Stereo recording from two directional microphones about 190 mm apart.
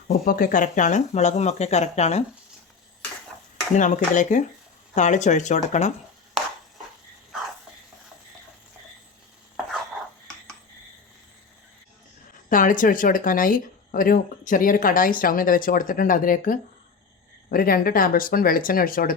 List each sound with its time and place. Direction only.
0.1 s speech: 50° left (ahead or behind)
3.8 s speech: 40° left (ahead or behind)
12.5 s speech: 45° left (ahead or behind)